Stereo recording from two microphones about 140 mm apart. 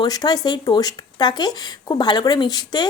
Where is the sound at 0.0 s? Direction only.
30° left (ahead or behind).